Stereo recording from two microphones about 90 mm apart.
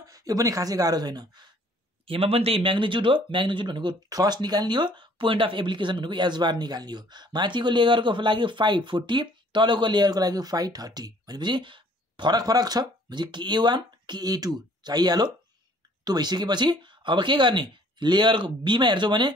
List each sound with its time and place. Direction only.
0.0 s speech: 40° right (ahead or behind)
2.0 s speech: 90° right; by 3.9 s 60° right (ahead or behind)
4.1 s speech: 45° right (ahead or behind)